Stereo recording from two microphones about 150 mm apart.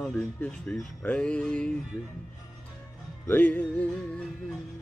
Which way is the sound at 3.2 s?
10° left (ahead or behind).